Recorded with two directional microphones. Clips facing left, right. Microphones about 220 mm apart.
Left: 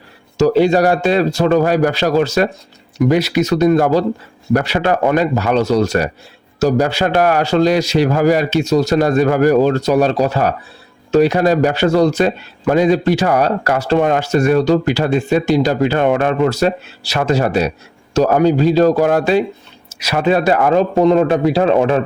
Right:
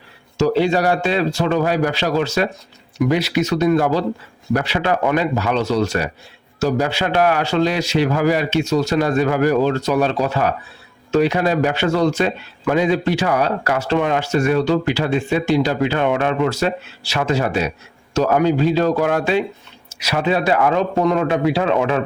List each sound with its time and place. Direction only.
0.3 s a man's voice: 45° left (ahead or behind)